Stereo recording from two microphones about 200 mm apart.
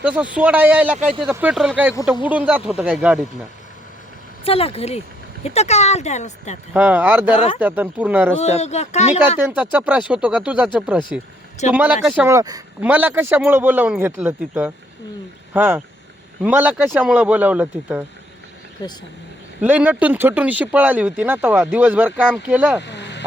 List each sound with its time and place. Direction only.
0.0 s speech: 5° right (ahead or behind)
4.4 s speech: 30° left (ahead or behind)
6.7 s speech: 10° right (ahead or behind)
8.4 s speech: 35° left (ahead or behind)
9.4 s speech: 10° right (ahead or behind)
18.8 s speech: 15° left (ahead or behind)
19.6 s speech: 10° right (ahead or behind)
22.8 s vehicle: 60° left (ahead or behind)